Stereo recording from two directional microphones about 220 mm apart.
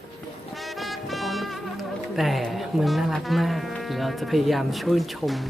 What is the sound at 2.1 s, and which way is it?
Speech, centre (ahead or behind).